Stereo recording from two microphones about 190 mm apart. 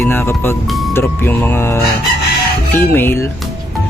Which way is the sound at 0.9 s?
10° left (ahead or behind).